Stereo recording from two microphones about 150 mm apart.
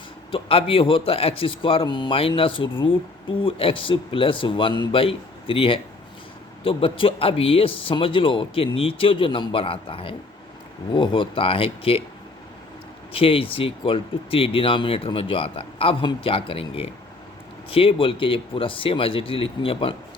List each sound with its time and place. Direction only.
0.3 s a man's voice: 40° left (ahead or behind)
13.1 s a man's voice: 40° left (ahead or behind)